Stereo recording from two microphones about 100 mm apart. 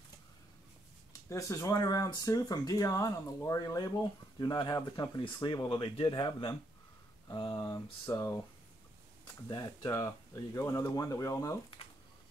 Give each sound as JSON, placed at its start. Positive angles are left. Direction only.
{"t": 1.3, "sound": "speech", "side_deg": 35}
{"t": 9.5, "sound": "speech", "side_deg": 40}